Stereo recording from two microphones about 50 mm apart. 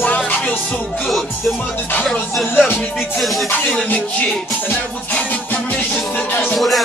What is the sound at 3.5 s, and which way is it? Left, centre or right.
Music, left.